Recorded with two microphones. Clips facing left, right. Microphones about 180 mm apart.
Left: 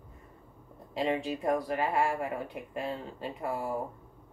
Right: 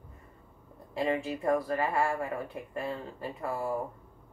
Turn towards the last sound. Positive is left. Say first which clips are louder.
# even
turn(degrees=15)  # may be behind; listen again after turning